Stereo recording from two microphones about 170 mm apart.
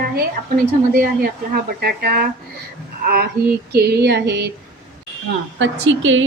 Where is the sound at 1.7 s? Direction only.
60° right (ahead or behind).